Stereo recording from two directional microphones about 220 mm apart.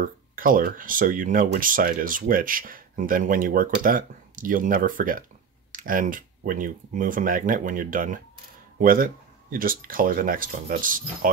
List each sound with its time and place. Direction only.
0.0 s speech: 40° right (ahead or behind)